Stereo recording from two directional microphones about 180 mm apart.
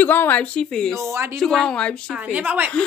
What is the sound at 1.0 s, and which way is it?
Speech, 15° right (ahead or behind).